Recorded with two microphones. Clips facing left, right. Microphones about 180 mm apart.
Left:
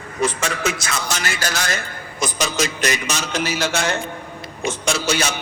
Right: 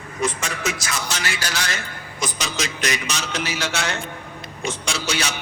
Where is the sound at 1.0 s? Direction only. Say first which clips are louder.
Left 3 dB; 45° left (ahead or behind).